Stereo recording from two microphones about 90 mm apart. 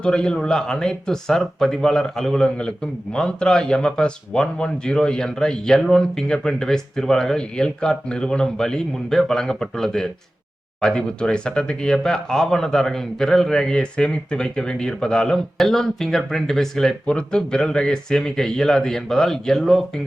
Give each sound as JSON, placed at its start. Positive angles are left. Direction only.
{"t": 0.0, "sound": "speech", "side_deg": 10}